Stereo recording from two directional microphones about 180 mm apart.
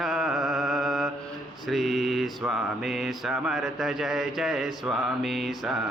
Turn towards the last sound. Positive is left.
turn(degrees=0)  # may be behind; listen again after turning